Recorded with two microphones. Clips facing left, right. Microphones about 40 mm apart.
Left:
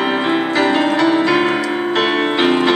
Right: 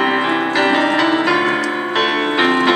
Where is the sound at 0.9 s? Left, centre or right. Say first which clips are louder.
Left 1 dB; right.